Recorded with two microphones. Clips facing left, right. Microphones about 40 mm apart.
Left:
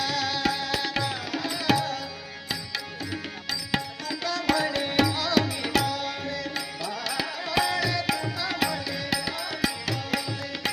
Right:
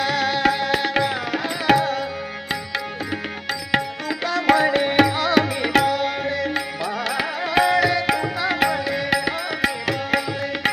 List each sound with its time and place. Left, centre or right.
0.0 s tabla: right
2.5 s music: right